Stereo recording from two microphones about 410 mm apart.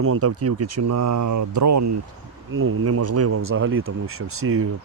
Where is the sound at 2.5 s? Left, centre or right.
Right.